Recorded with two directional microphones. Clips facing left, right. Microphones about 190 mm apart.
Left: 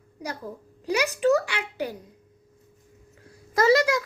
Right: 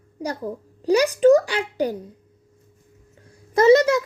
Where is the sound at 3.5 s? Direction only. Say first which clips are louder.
Right 6 dB; 25° right (ahead or behind).